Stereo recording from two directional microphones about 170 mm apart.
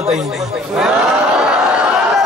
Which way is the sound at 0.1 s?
5° right (ahead or behind).